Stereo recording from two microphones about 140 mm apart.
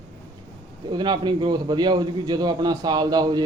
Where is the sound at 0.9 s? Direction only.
30° right (ahead or behind).